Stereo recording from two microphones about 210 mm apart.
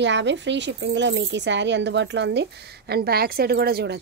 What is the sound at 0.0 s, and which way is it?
Speech, 60° right (ahead or behind).